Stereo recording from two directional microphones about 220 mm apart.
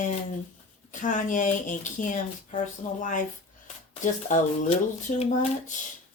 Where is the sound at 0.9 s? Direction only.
35° left (ahead or behind).